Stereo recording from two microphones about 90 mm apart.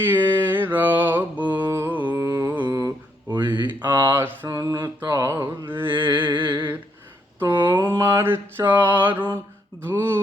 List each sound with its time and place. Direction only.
0.0 s mantra: 20° right (ahead or behind)
2.2 s carnatic music: 35° right (ahead or behind)
3.2 s a sound: 60° right (ahead or behind)
4.0 s mantra: 25° right (ahead or behind)
4.4 s mantra: 40° right (ahead or behind)
4.8 s mantra: 30° right (ahead or behind)
5.9 s a sound: 60° right (ahead or behind)
7.5 s mantra: 60° right (ahead or behind)
7.9 s mantra: 35° right (ahead or behind)